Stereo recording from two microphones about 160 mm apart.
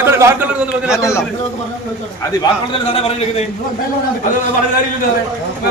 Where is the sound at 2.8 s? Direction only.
35° left (ahead or behind).